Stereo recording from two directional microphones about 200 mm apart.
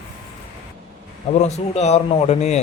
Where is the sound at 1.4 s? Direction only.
35° left (ahead or behind).